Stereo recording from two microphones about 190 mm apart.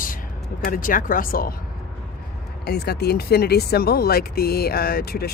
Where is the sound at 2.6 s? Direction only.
55° left (ahead or behind).